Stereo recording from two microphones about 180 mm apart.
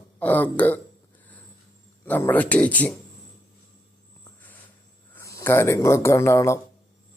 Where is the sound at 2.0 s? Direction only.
10° left (ahead or behind).